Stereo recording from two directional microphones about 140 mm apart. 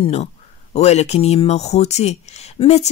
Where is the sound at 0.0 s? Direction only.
45° left (ahead or behind).